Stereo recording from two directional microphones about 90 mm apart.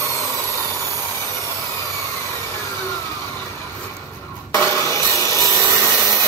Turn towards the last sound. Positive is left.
turn(degrees=30)  # may be behind; listen again after turning